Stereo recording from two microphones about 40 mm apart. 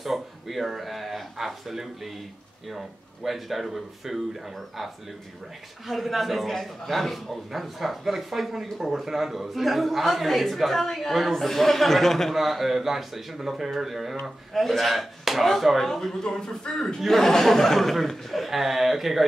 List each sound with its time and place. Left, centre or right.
0.0 s speech: centre
3.3 s a man's voice: centre
5.9 s a man's voice: centre
12.4 s a man's voice: centre
15.9 s a man's voice: centre